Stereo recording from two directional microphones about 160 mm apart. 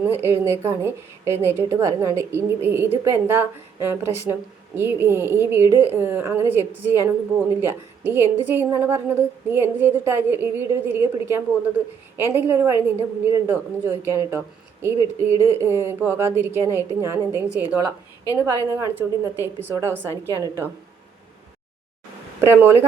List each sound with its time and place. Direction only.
0.0 s a woman's voice: 15° right (ahead or behind)
22.4 s speech: 15° right (ahead or behind)